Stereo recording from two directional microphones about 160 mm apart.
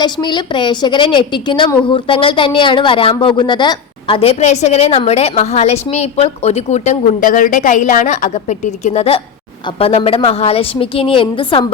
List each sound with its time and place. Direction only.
0.0 s a woman's voice: 30° left (ahead or behind)